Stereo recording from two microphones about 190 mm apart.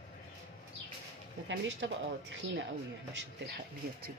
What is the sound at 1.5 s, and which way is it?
Speech, 75° right (ahead or behind).